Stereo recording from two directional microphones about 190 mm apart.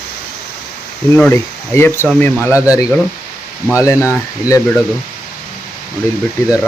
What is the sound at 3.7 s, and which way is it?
Speech, 15° left (ahead or behind).